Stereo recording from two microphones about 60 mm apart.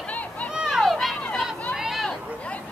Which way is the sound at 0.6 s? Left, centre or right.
Centre.